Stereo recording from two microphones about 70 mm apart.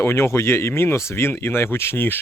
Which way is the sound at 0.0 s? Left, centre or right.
Left.